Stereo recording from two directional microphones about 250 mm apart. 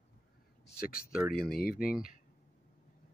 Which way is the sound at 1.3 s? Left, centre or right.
Left.